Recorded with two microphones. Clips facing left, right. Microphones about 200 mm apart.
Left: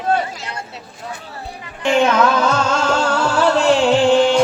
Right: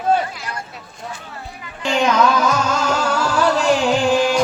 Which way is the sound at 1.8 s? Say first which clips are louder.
Left 2 dB; 25° left (ahead or behind).